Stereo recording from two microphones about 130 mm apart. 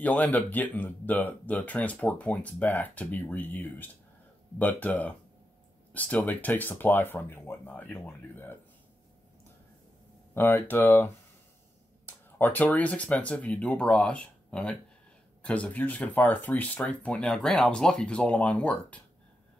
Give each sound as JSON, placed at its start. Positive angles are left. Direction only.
{"t": 0.0, "sound": "speech", "side_deg": 10}
{"t": 10.3, "sound": "speech", "side_deg": 15}
{"t": 12.1, "sound": "speech", "side_deg": 15}